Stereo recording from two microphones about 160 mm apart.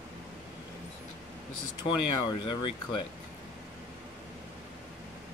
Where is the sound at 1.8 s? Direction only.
30° left (ahead or behind).